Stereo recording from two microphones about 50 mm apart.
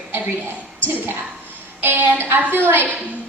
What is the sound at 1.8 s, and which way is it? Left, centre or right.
A woman's voice, right.